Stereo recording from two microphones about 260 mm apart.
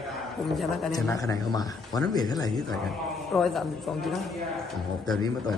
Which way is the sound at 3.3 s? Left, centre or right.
Centre.